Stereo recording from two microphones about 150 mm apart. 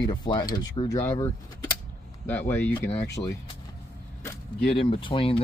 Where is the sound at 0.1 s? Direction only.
30° left (ahead or behind).